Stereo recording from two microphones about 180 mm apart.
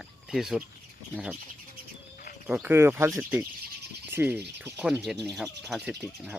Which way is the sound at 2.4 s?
10° right (ahead or behind).